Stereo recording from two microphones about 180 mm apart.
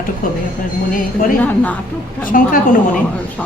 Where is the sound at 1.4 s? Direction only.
10° left (ahead or behind).